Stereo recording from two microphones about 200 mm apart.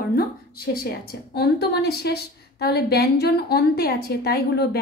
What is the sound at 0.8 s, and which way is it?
A woman's voice, 55° left (ahead or behind).